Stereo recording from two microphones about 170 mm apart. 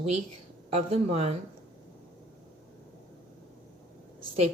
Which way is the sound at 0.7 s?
35° right (ahead or behind).